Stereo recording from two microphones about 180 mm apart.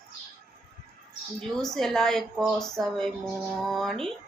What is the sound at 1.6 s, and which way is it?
Speech, centre (ahead or behind).